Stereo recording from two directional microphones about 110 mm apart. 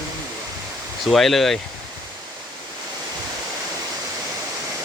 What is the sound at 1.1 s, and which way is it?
Speech, centre (ahead or behind).